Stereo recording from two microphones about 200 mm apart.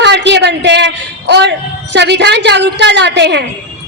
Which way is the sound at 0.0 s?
60° right (ahead or behind).